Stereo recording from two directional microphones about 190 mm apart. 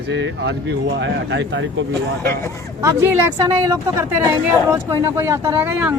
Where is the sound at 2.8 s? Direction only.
10° right (ahead or behind).